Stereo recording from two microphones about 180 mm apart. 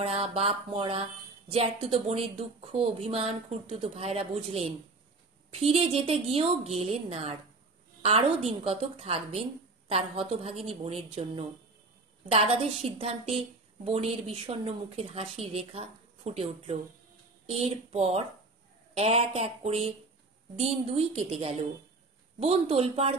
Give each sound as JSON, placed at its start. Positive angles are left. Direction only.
{"t": 0.0, "sound": "a woman's voice", "side_deg": -35}